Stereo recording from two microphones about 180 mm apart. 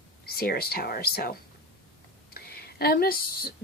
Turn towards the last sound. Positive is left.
turn(degrees=55)  # may be behind; listen again after turning